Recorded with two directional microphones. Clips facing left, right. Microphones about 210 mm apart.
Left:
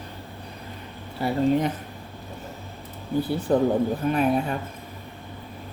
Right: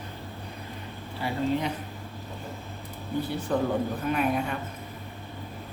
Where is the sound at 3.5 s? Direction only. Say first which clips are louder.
Left 6 dB; 35° left (ahead or behind).